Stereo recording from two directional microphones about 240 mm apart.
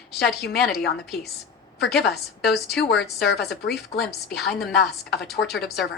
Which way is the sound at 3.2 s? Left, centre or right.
Left.